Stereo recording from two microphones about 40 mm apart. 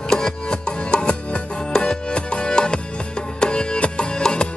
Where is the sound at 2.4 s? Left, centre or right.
Left.